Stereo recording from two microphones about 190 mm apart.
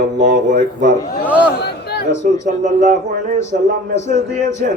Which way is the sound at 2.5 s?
40° right (ahead or behind).